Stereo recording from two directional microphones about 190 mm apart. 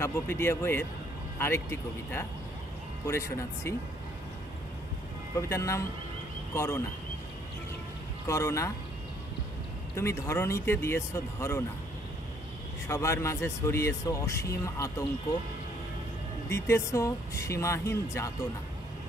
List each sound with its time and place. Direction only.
0.0 s speech: 10° left (ahead or behind)
5.5 s speech: 15° left (ahead or behind)
8.3 s speech: 15° left (ahead or behind)
9.9 s speech: 15° left (ahead or behind)
12.8 s speech: 15° left (ahead or behind)
16.4 s speech: 15° left (ahead or behind)